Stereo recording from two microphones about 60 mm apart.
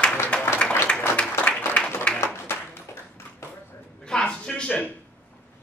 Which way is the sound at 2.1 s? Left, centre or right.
Centre.